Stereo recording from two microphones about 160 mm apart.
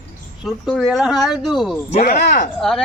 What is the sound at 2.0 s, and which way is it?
Speech, 80° left.